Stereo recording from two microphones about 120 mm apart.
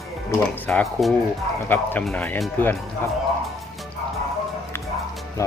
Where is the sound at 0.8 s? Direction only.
Centre (ahead or behind).